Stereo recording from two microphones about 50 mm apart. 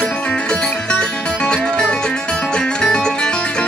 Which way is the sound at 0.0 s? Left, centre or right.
Centre.